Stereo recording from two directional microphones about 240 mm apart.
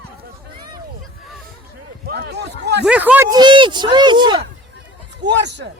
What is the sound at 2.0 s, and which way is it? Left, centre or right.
Speech, right.